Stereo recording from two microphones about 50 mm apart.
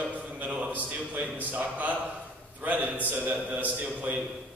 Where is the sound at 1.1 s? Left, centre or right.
Right.